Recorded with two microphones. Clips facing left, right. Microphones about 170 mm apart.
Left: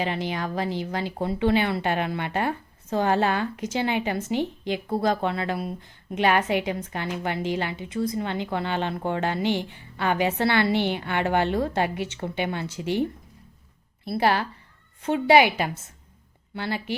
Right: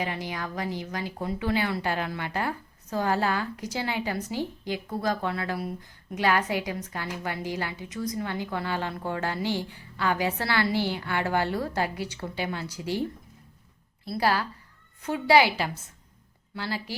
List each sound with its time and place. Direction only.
0.0 s speech: 25° left (ahead or behind)
14.1 s speech: 25° left (ahead or behind)